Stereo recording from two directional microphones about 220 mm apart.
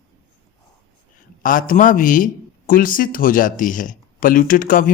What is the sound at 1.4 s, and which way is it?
A man's voice, 40° left (ahead or behind).